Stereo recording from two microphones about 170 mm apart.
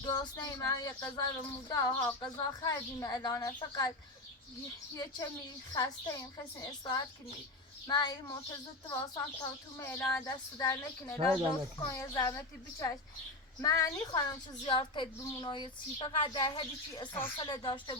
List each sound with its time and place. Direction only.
0.0 s speech: 25° left (ahead or behind)
5.7 s speech: 20° left (ahead or behind)